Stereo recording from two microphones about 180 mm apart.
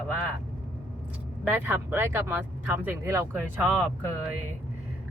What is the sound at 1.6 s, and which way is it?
A woman's voice, 10° right (ahead or behind).